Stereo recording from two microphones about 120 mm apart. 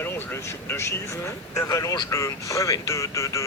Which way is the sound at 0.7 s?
20° left (ahead or behind).